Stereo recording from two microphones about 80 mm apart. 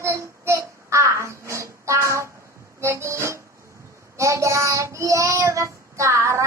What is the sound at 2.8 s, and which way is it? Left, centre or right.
Music, right.